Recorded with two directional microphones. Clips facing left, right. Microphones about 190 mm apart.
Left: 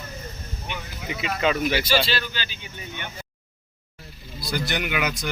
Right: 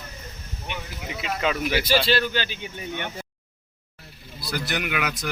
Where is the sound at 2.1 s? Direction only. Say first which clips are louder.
Right 6 dB; 55° right (ahead or behind).